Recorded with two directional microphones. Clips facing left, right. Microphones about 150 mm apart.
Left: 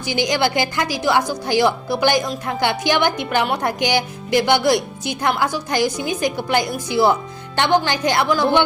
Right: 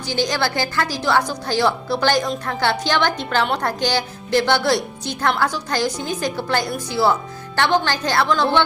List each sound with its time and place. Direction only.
0.0 s a woman's voice: 15° left (ahead or behind)